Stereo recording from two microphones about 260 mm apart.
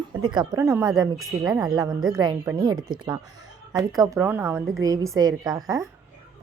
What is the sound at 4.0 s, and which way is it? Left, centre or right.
A woman's voice, centre.